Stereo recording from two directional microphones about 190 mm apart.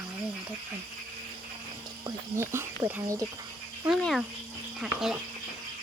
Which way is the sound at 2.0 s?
15° right (ahead or behind).